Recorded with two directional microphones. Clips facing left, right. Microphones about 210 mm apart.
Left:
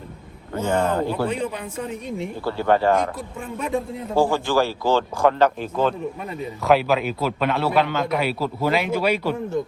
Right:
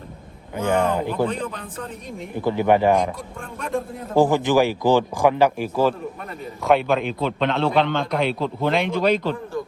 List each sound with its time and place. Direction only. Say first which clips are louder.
0.7 s speech: right 1 dB; 15° right (ahead or behind)
2.4 s speech: right 3 dB; 15° right (ahead or behind)
4.1 s speech: right 3 dB; 15° right (ahead or behind)
6.7 s a man's voice: even; centre (ahead or behind)